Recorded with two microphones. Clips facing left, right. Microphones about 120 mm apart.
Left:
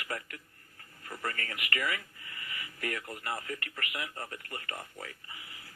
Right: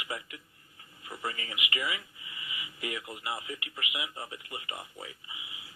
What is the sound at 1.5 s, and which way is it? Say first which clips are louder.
Speech: even; 55° left (ahead or behind).